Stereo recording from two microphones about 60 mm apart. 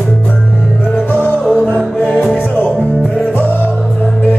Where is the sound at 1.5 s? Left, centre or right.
Left.